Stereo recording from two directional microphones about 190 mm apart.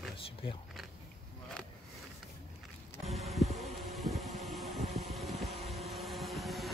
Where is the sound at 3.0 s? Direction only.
Centre (ahead or behind).